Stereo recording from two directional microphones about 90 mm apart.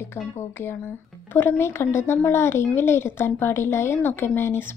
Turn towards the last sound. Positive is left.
turn(degrees=25)  # may be behind; listen again after turning